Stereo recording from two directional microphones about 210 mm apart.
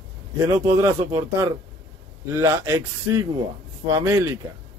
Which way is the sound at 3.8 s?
10° right (ahead or behind).